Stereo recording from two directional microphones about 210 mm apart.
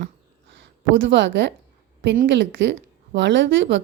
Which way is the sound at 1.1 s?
60° right (ahead or behind).